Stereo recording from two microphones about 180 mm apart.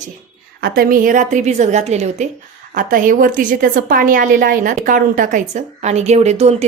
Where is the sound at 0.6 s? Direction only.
60° right (ahead or behind).